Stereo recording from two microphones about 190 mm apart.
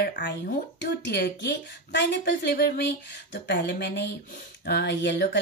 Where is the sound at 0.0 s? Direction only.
50° left (ahead or behind).